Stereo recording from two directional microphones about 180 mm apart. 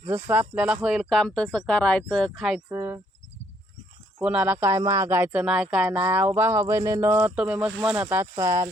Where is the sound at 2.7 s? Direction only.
15° right (ahead or behind).